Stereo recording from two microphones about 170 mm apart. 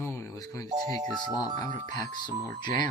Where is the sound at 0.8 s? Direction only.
40° right (ahead or behind).